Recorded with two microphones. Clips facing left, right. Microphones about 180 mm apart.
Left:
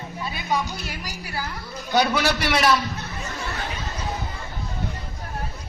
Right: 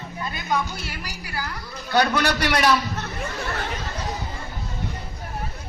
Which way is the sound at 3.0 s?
60° right (ahead or behind).